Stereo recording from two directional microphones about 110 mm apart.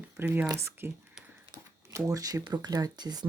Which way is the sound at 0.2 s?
20° right (ahead or behind).